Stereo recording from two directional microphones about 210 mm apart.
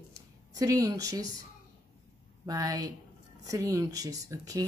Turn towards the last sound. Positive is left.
turn(degrees=-15)  # may be behind; listen again after turning